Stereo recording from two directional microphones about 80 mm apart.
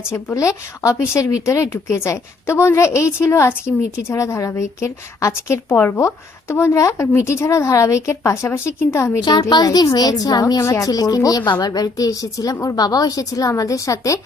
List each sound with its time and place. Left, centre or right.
0.3 s a woman's voice: left
9.5 s a woman's voice: left
10.6 s a woman's voice: left
10.8 s a woman's voice: left